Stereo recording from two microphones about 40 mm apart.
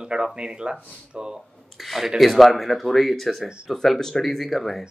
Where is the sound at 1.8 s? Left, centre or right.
Centre.